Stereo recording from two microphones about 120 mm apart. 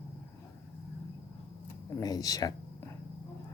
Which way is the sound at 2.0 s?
30° left (ahead or behind).